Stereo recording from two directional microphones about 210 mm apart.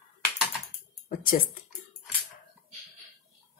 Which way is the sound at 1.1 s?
45° left (ahead or behind).